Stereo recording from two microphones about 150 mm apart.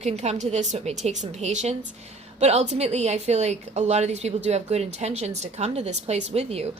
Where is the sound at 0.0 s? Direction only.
45° right (ahead or behind).